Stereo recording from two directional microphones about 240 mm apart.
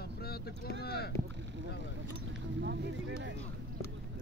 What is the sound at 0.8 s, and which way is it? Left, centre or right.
Speech, left.